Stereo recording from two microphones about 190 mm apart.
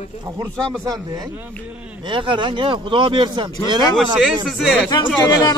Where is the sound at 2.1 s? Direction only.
25° right (ahead or behind).